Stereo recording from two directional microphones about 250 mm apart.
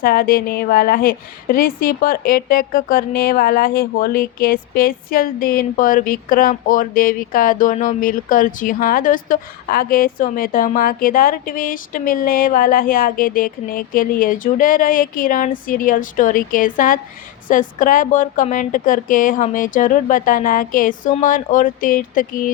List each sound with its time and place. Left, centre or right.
0.0 s a woman's voice: left